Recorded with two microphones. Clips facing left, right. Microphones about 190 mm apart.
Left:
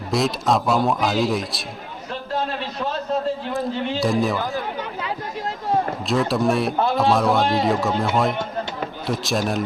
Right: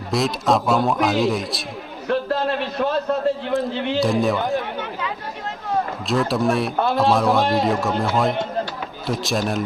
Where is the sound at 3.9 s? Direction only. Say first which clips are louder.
Right 2 dB; centre (ahead or behind).